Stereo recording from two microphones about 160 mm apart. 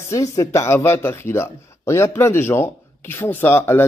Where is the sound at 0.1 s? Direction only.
20° left (ahead or behind).